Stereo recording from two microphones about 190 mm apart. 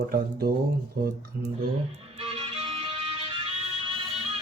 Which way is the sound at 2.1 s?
30° right (ahead or behind).